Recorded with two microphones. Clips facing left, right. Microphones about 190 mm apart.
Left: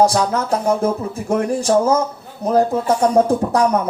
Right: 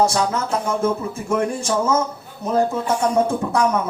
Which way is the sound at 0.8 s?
35° left (ahead or behind).